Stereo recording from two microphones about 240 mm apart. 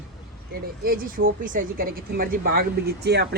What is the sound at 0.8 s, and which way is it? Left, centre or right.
Speech, right.